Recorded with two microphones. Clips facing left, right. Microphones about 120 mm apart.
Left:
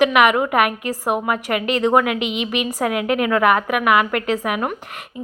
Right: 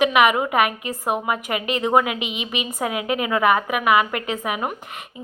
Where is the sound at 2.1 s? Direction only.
60° left (ahead or behind).